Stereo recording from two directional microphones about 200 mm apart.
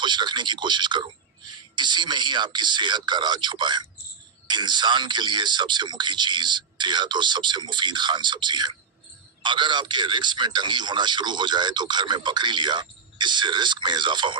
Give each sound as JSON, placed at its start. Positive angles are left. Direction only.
{"t": 0.0, "sound": "a man's voice", "side_deg": -20}